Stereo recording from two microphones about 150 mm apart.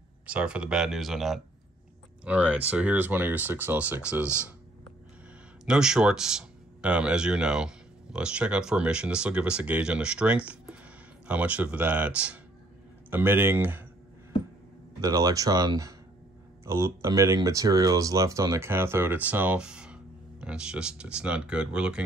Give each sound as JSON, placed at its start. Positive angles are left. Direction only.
{"t": 0.3, "sound": "speech", "side_deg": -10}
{"t": 5.7, "sound": "speech", "side_deg": -5}
{"t": 15.0, "sound": "speech", "side_deg": -25}